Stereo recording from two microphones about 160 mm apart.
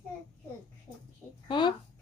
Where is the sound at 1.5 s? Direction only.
30° left (ahead or behind).